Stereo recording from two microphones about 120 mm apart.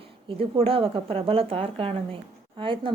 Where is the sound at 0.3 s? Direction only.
50° right (ahead or behind).